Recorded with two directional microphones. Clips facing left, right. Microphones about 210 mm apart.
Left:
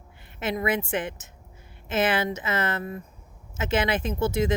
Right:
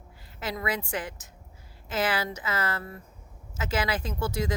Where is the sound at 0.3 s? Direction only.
25° left (ahead or behind).